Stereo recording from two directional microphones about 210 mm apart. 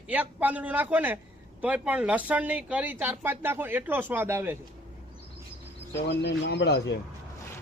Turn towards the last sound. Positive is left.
turn(degrees=55)  # may be behind; listen again after turning